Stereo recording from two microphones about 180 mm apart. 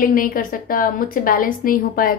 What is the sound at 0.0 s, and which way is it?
A woman's voice, 50° left (ahead or behind).